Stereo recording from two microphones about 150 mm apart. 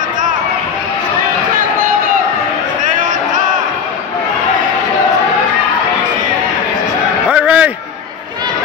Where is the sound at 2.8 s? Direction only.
60° right (ahead or behind).